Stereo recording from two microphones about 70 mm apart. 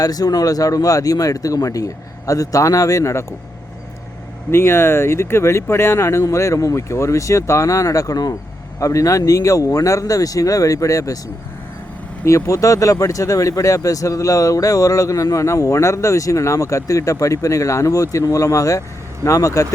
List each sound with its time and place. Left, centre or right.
0.0 s speech: left
4.5 s speech: left
8.8 s speech: left
12.2 s speech: left